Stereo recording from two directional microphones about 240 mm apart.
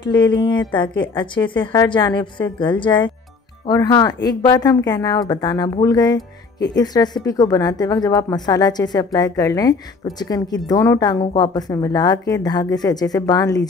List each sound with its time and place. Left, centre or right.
0.1 s a woman's voice: centre